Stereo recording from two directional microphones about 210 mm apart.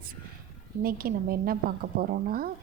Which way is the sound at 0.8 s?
45° right (ahead or behind).